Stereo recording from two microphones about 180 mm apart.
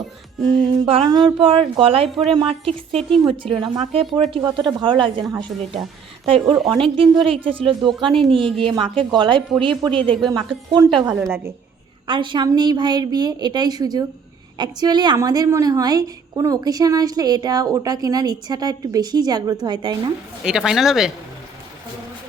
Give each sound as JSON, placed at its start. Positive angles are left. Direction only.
{"t": 0.9, "sound": "a woman's voice", "side_deg": -25}
{"t": 10.1, "sound": "speech", "side_deg": 0}
{"t": 10.5, "sound": "a woman's voice", "side_deg": -25}
{"t": 11.0, "sound": "a woman's voice", "side_deg": -15}
{"t": 12.0, "sound": "a woman's voice", "side_deg": -25}
{"t": 20.4, "sound": "speech", "side_deg": -5}